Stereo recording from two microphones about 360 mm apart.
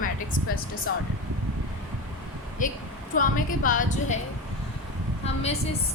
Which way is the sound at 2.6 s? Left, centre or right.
Left.